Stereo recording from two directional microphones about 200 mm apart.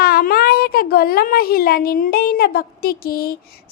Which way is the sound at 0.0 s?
50° left (ahead or behind).